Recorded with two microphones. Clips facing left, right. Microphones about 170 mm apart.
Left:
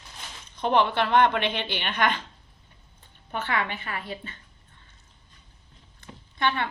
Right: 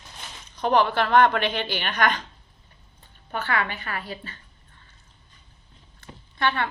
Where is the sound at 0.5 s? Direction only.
25° left (ahead or behind).